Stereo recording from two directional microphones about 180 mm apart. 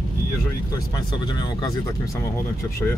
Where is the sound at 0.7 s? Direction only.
20° left (ahead or behind).